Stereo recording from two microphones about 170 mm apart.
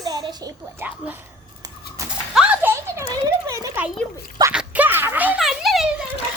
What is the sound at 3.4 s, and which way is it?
Speech, 15° right (ahead or behind).